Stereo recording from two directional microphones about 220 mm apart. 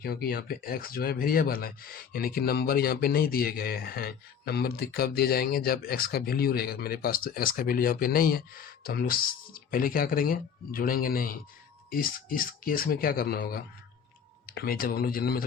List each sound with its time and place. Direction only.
0.0 s speech: 45° left (ahead or behind)